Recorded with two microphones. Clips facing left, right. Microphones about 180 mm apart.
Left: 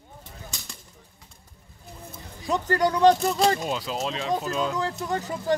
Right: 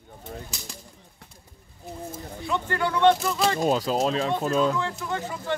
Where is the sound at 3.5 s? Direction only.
45° right (ahead or behind).